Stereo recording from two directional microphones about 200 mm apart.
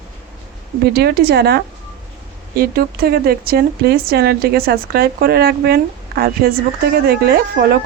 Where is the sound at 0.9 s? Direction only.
50° right (ahead or behind).